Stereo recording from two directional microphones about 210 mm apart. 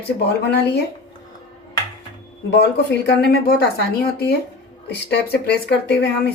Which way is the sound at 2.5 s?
50° left (ahead or behind).